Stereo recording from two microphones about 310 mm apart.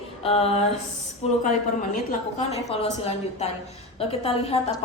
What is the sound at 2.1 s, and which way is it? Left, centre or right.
A woman's voice, left.